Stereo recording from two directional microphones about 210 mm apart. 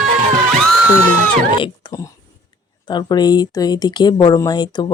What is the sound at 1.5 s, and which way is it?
Speech, 20° left (ahead or behind).